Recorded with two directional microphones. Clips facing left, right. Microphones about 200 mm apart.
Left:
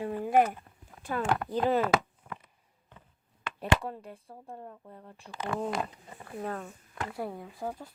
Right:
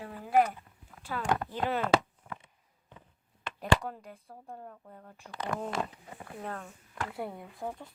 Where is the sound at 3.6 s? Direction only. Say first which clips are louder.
Even; 30° left (ahead or behind).